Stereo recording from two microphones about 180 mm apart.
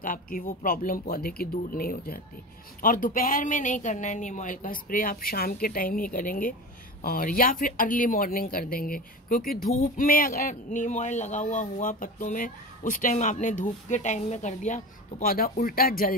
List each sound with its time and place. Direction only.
0.0 s speech: 50° left (ahead or behind)